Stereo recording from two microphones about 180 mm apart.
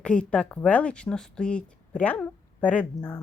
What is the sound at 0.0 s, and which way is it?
Speech, 5° left (ahead or behind).